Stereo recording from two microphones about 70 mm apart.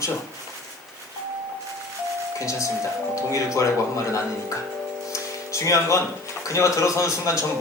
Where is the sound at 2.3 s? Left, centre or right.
Left.